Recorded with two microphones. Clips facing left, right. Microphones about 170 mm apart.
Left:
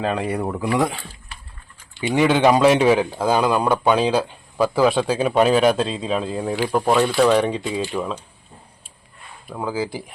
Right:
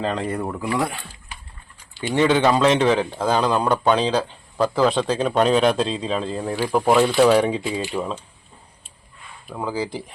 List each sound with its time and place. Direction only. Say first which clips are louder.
0.0 s speech: left 2 dB; 10° left (ahead or behind)
2.0 s speech: left 1 dB; 5° left (ahead or behind)
6.7 s speech: right 2 dB; 5° right (ahead or behind)
9.5 s speech: left 1 dB; centre (ahead or behind)